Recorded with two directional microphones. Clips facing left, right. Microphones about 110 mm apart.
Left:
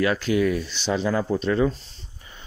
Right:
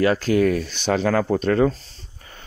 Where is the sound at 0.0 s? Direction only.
40° right (ahead or behind).